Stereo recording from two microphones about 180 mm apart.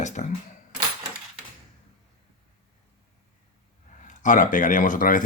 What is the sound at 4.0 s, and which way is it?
Speech, 45° left (ahead or behind).